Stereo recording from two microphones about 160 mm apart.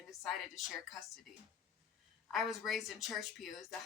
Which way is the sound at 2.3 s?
Centre (ahead or behind).